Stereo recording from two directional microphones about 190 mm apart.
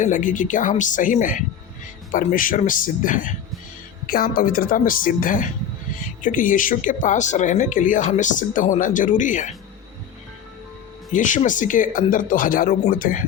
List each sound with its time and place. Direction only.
0.0 s speech: 40° left (ahead or behind)
11.1 s speech: 40° left (ahead or behind)